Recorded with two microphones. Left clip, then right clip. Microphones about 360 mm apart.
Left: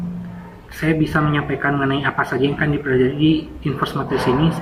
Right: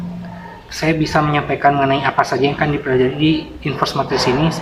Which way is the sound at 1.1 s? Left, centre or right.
Centre.